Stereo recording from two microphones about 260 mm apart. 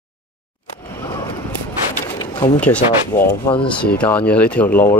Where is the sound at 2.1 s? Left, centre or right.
Centre.